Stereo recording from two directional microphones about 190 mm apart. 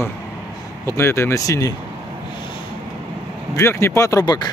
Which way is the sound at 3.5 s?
15° left (ahead or behind).